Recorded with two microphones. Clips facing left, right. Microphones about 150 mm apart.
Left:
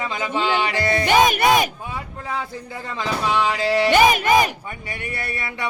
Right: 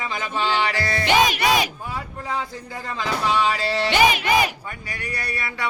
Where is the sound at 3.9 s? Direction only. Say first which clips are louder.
Left 2 dB; 45° left (ahead or behind).